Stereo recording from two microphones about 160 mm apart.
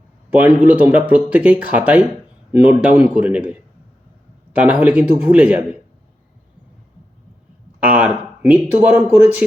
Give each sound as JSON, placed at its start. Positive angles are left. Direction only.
{"t": 0.3, "sound": "speech", "side_deg": -10}
{"t": 7.8, "sound": "speech", "side_deg": -10}